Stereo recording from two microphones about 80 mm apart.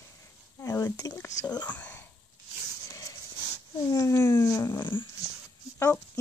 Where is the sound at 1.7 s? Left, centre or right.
Left.